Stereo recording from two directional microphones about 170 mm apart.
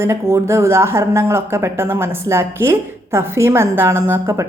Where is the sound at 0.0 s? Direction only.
15° right (ahead or behind).